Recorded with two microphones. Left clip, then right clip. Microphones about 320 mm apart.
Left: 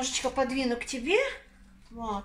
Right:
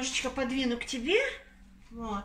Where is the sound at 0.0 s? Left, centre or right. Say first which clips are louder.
Left 3 dB; centre.